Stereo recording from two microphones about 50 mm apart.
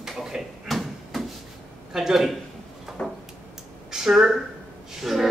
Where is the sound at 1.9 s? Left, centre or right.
Centre.